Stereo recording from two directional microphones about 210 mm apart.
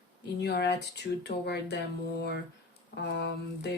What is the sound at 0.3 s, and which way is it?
Speech, 50° left (ahead or behind).